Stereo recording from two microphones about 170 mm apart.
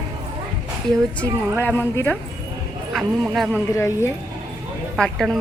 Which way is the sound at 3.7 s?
15° left (ahead or behind).